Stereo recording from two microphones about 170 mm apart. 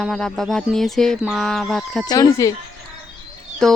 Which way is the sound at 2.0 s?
25° left (ahead or behind).